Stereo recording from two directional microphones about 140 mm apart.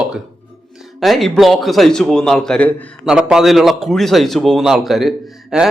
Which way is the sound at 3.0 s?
5° right (ahead or behind).